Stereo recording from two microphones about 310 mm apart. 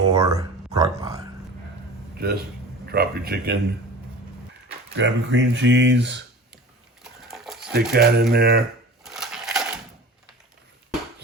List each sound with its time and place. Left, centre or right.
0.1 s speech: centre
2.1 s speech: right
4.9 s speech: right
7.0 s sewing machine: centre
7.7 s speech: right
9.0 s a sound: centre